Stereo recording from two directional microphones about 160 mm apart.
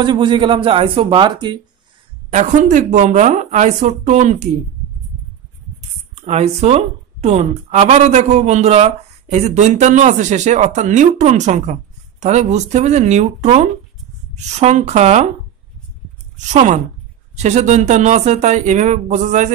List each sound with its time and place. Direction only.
0.0 s speech: 30° right (ahead or behind)
2.3 s speech: 50° right (ahead or behind)
6.1 s speech: 40° right (ahead or behind)
16.3 s speech: 50° right (ahead or behind)